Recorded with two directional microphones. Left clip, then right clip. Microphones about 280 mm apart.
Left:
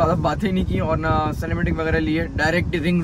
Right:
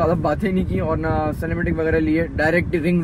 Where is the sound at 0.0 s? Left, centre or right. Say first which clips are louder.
Right 1 dB; left.